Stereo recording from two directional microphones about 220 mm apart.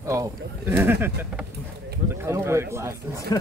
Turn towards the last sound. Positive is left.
turn(degrees=-10)  # may be behind; listen again after turning